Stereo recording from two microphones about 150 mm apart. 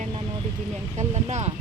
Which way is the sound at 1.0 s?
50° right (ahead or behind).